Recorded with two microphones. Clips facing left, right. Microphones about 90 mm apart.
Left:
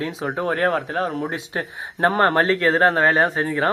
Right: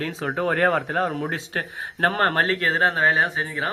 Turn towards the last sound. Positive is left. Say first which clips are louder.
# left 6 dB
turn(degrees=40)  # may be behind; listen again after turning